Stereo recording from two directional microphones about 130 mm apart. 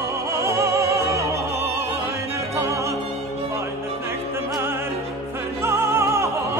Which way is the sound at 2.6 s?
25° right (ahead or behind).